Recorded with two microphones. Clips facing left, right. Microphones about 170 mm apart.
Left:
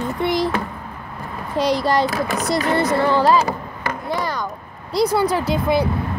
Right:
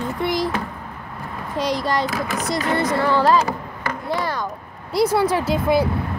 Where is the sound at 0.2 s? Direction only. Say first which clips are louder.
Left 2 dB; 25° left (ahead or behind).